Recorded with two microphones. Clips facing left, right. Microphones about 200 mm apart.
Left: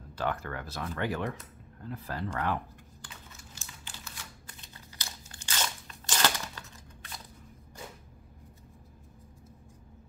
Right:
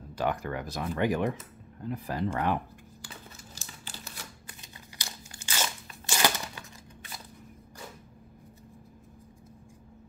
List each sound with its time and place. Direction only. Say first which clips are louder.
0.1 s speech: right 3 dB; 15° right (ahead or behind)
4.6 s crunch: right 2 dB; 15° right (ahead or behind)